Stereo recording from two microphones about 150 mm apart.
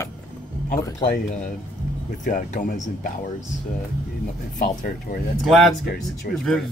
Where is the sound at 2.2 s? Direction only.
60° left (ahead or behind).